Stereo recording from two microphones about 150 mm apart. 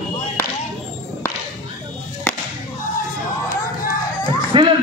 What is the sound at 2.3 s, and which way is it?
Music, 10° left (ahead or behind).